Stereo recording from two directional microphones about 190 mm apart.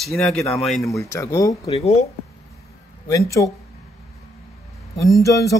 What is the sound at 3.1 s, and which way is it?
Speech, 15° left (ahead or behind).